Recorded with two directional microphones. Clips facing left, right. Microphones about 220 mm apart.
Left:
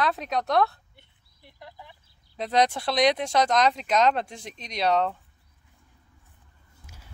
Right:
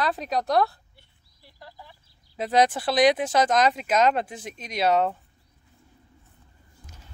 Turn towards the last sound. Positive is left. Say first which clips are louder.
# right 1 dB
turn(degrees=10)  # may be behind; listen again after turning